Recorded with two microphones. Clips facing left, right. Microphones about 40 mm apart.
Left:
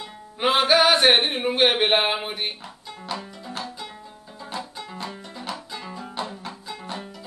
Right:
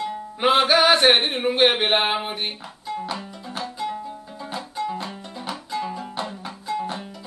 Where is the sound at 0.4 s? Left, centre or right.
Centre.